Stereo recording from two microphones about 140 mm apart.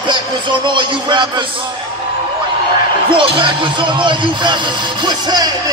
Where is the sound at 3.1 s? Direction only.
35° right (ahead or behind).